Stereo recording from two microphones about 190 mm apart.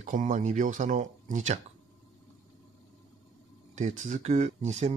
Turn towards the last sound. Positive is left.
turn(degrees=-35)  # may be behind; listen again after turning